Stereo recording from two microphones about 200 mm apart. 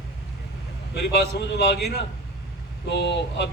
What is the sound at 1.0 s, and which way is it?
A man's voice, 55° left (ahead or behind).